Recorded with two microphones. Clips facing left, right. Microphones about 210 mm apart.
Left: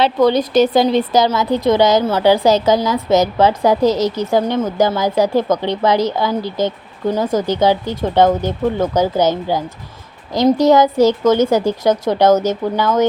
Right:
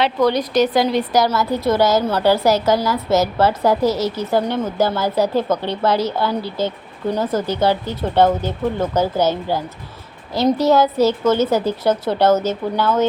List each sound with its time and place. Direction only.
0.3 s a woman's voice: 25° left (ahead or behind)